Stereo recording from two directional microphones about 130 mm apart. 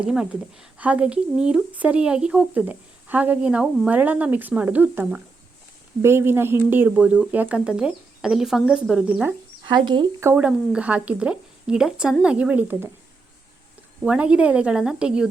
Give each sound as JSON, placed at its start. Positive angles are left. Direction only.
{"t": 0.0, "sound": "speech", "side_deg": -5}
{"t": 9.6, "sound": "speech", "side_deg": -35}
{"t": 10.3, "sound": "speech", "side_deg": -10}
{"t": 14.0, "sound": "speech", "side_deg": -10}